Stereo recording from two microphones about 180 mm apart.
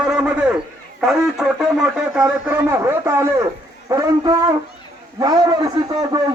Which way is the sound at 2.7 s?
15° right (ahead or behind).